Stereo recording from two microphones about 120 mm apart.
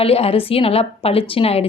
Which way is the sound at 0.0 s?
55° left (ahead or behind).